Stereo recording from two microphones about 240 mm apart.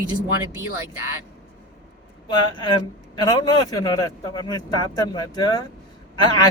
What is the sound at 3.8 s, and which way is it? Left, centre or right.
Speech, centre.